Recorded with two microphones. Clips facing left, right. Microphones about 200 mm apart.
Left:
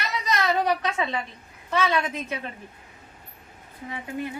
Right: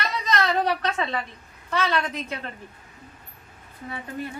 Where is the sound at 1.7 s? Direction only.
10° left (ahead or behind).